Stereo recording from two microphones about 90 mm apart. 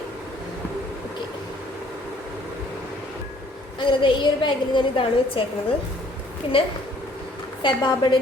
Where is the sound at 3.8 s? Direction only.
65° left (ahead or behind); by 5.5 s 85° left.